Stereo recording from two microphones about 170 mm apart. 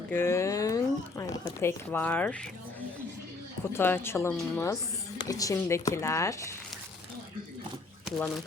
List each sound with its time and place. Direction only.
0.1 s a sound: 15° left (ahead or behind)
1.9 s speech: 10° left (ahead or behind)
3.7 s speech: 15° left (ahead or behind)